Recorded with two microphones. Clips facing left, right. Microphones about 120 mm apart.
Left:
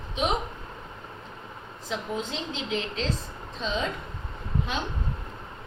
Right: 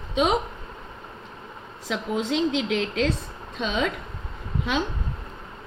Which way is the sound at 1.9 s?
85° right.